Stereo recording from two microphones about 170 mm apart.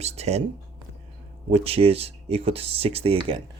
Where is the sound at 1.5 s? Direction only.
35° right (ahead or behind).